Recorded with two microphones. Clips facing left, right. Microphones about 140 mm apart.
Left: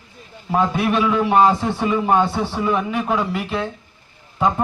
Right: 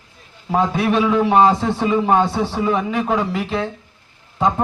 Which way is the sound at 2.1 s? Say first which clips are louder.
Right 1 dB; 20° right (ahead or behind).